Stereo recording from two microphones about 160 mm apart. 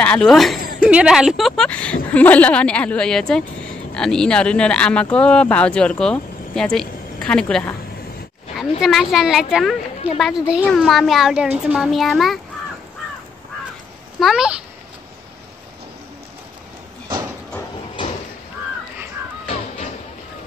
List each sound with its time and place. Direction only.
0.0 s a woman's voice: 5° left (ahead or behind)
14.2 s a woman's voice: 5° right (ahead or behind)
19.4 s music: 40° left (ahead or behind)